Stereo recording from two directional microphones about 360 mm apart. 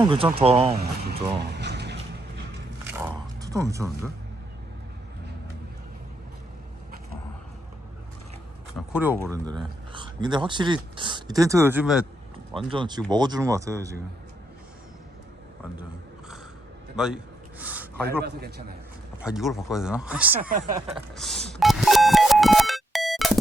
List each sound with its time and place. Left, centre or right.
0.0 s speech: centre
1.4 s a sound: right
3.0 s mechanisms: centre
8.9 s speech: centre
17.0 s speech: centre
17.6 s a sound: centre
18.2 s a man's voice: right
19.2 s speech: centre
20.5 s a man's voice: right
20.9 s music: centre